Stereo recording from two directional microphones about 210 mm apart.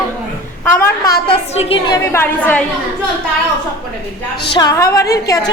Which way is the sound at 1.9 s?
10° left (ahead or behind).